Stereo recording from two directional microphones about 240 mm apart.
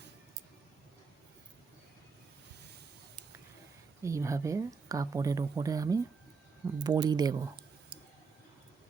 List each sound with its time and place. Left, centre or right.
4.0 s speech: centre